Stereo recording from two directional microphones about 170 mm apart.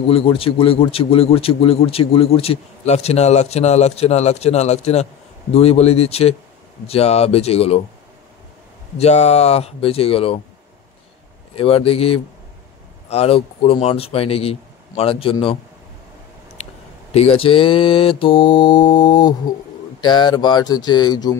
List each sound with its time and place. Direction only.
0.1 s a man's voice: 35° left (ahead or behind)
8.9 s a man's voice: 40° left (ahead or behind)
11.5 s a man's voice: 35° left (ahead or behind)
17.1 s a man's voice: 35° left (ahead or behind)